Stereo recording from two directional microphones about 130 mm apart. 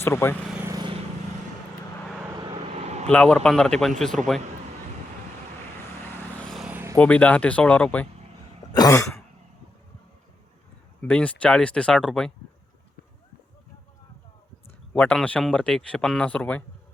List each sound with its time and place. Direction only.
0.0 s speech: 20° left (ahead or behind)
2.6 s vehicle: 55° right (ahead or behind)
3.1 s speech: 10° left (ahead or behind)
6.7 s vehicle: 15° right (ahead or behind)
6.9 s a man's voice: 10° left (ahead or behind)
8.7 s throat clearing: 30° left (ahead or behind)
11.0 s a man's voice: 10° left (ahead or behind)
14.9 s a man's voice: 10° left (ahead or behind)